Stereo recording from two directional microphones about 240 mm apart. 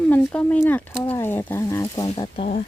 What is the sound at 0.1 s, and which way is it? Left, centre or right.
Speech, centre.